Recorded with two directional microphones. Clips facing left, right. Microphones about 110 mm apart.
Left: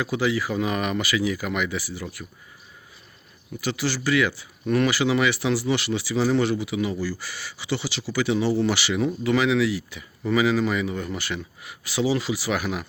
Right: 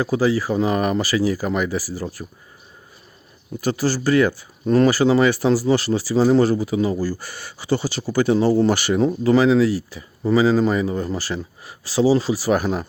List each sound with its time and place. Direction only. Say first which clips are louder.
0.0 s speech: right 5 dB; 35° right (ahead or behind)
3.6 s speech: right 6 dB; 45° right (ahead or behind)